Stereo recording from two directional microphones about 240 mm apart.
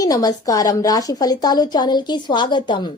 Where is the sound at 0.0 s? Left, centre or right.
Centre.